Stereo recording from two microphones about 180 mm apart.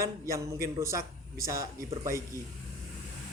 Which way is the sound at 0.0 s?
15° right (ahead or behind).